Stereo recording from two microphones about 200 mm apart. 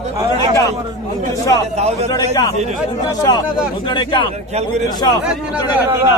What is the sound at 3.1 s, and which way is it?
Speech, 20° left (ahead or behind).